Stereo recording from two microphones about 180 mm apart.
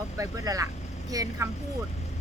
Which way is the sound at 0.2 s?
20° right (ahead or behind).